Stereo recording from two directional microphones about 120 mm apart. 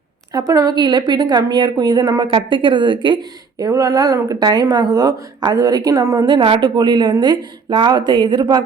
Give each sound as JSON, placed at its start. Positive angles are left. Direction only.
{"t": 0.3, "sound": "a woman's voice", "side_deg": -30}